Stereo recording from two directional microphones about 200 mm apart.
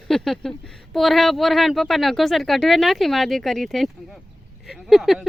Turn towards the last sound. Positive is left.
turn(degrees=0)  # may be behind; listen again after turning